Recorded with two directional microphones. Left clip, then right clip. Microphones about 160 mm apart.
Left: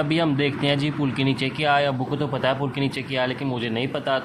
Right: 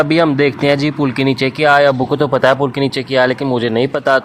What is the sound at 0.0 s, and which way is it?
Speech, 40° right (ahead or behind).